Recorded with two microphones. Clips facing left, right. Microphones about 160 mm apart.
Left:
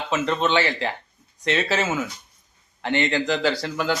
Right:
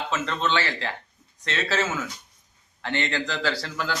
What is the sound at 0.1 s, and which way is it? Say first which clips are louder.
Speech: left 6 dB; 15° left (ahead or behind).